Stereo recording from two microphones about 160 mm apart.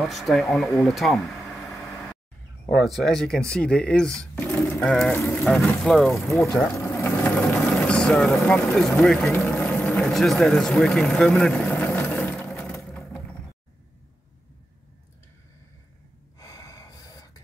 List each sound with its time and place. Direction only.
0.0 s speech: centre (ahead or behind)
2.7 s speech: centre (ahead or behind)
6.8 s vehicle: 10° left (ahead or behind)
16.3 s gasp: 20° left (ahead or behind)